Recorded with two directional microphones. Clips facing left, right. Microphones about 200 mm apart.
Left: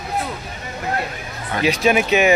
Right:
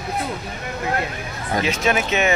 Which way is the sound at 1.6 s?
15° left (ahead or behind).